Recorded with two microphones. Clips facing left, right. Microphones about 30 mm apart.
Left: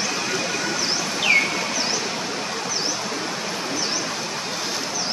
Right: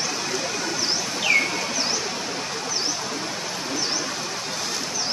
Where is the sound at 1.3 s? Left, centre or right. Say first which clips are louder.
Left 2 dB; left.